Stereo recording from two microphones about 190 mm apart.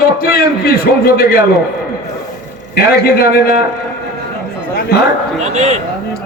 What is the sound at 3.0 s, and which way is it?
Speech, 55° left (ahead or behind).